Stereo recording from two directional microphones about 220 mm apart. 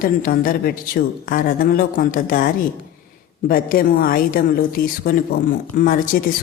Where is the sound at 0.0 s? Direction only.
40° left (ahead or behind).